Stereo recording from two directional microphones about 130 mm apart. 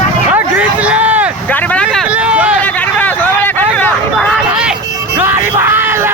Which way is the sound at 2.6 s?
15° left (ahead or behind).